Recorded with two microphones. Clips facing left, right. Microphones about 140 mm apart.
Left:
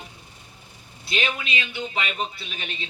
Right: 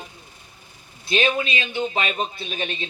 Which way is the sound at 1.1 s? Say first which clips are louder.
Right 6 dB; 35° right (ahead or behind).